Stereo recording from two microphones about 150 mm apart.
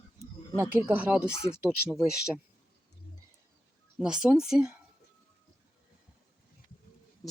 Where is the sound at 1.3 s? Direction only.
20° left (ahead or behind).